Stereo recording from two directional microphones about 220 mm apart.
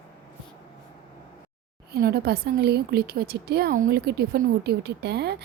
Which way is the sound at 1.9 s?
45° right (ahead or behind).